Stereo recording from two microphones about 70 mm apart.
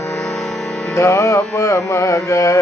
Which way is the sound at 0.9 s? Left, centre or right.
Left.